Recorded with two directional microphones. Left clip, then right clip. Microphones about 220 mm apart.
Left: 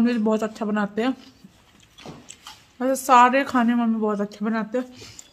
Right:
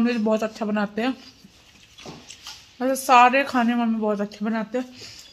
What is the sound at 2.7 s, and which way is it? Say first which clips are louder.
Speech: even; 10° left (ahead or behind).